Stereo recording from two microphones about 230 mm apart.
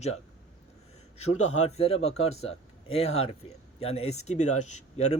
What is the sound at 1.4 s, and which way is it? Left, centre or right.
Speech, left.